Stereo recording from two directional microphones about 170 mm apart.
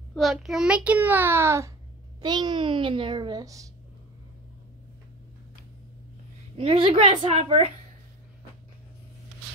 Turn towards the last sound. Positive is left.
turn(degrees=-35)  # may be behind; listen again after turning